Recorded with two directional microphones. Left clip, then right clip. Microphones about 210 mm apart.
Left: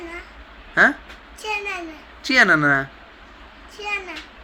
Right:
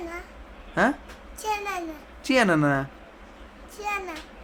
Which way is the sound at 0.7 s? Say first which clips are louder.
Left 7 dB; 20° right (ahead or behind).